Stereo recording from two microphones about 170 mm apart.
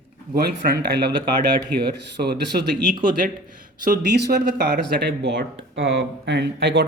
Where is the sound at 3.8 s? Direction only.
70° right (ahead or behind).